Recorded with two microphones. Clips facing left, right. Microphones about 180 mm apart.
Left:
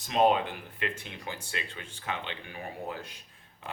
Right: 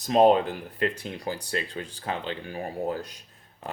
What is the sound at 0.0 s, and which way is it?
Speech, 40° right (ahead or behind).